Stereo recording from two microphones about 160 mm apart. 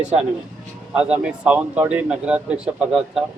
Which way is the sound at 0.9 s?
5° right (ahead or behind).